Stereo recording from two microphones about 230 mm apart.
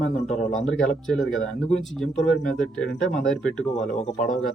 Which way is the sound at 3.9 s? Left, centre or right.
Left.